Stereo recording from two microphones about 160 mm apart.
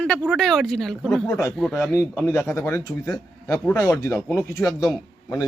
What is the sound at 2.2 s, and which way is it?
A man's voice, 15° left (ahead or behind).